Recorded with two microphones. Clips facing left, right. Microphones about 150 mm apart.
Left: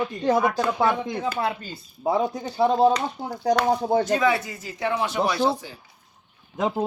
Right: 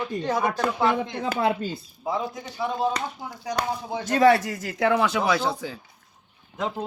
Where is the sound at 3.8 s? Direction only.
50° left (ahead or behind).